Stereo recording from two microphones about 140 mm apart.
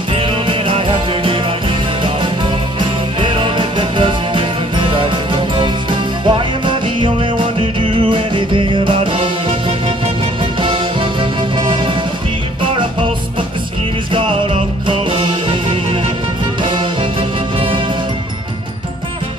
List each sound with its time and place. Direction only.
0.1 s music: 40° right (ahead or behind)
3.2 s music: 35° right (ahead or behind)
14.1 s music: 35° right (ahead or behind)